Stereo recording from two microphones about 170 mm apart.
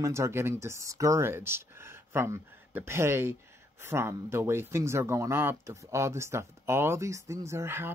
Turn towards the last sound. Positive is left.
turn(degrees=-15)  # may be behind; listen again after turning